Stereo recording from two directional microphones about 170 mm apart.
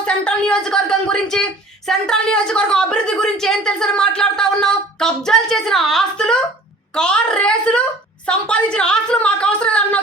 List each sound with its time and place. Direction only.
0.0 s a woman's voice: 5° left (ahead or behind)